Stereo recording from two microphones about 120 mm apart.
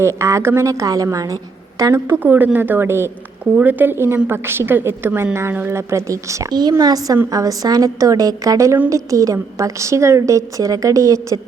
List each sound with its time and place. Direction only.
0.0 s a woman's voice: 25° right (ahead or behind)